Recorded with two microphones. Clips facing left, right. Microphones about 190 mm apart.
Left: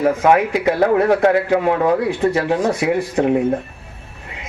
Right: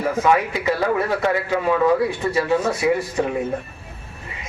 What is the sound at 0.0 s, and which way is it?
A man's voice, 60° left (ahead or behind).